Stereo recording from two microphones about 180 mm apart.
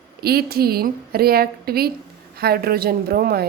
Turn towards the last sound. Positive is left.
turn(degrees=-55)  # may be behind; listen again after turning